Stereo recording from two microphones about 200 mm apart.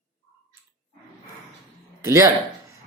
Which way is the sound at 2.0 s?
15° right (ahead or behind).